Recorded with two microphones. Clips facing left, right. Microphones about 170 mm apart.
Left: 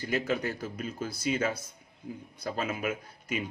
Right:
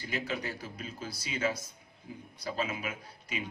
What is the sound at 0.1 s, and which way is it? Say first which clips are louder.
A man's voice: left 6 dB; 45° left (ahead or behind).